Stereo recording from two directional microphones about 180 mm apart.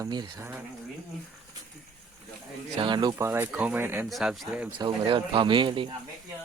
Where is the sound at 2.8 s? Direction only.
25° right (ahead or behind).